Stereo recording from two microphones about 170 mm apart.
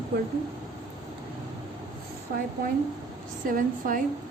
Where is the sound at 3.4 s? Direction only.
55° right (ahead or behind).